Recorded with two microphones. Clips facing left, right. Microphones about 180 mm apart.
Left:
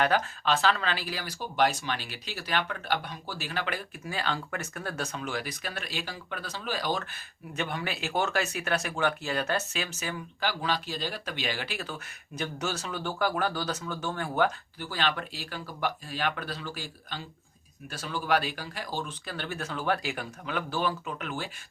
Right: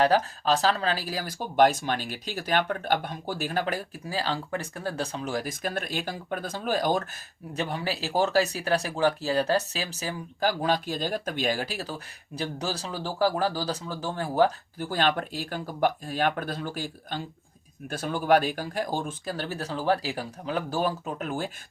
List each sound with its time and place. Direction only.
0.0 s speech: 35° right (ahead or behind)